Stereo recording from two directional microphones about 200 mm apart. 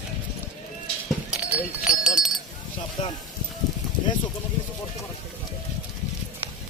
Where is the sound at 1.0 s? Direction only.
5° right (ahead or behind).